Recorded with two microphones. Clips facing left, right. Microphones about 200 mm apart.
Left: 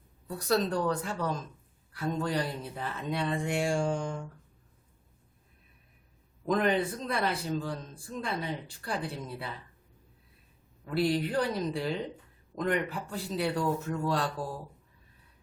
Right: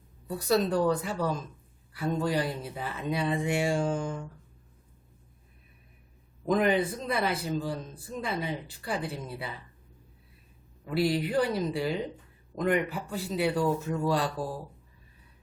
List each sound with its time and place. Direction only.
0.3 s a man's voice: 5° right (ahead or behind)
6.5 s a man's voice: 5° right (ahead or behind)
10.8 s a man's voice: 5° right (ahead or behind)